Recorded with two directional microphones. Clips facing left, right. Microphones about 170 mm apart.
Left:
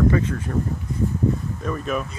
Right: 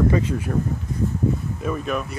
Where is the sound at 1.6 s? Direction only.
5° right (ahead or behind).